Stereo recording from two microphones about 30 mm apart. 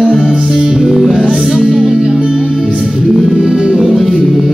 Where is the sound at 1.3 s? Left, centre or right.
Centre.